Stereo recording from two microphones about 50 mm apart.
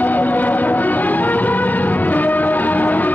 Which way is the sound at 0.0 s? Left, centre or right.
Left.